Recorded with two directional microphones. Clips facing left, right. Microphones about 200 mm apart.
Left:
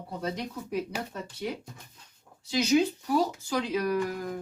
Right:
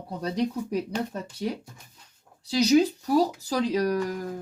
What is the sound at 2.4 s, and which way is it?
Speech, 35° right (ahead or behind).